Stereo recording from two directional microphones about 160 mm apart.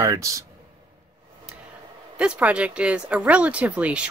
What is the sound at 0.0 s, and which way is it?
Speech, 20° right (ahead or behind).